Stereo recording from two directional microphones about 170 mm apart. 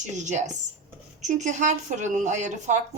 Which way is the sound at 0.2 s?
45° right (ahead or behind).